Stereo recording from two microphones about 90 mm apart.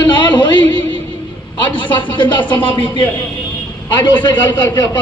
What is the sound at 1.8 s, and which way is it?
A man's voice, 65° left (ahead or behind).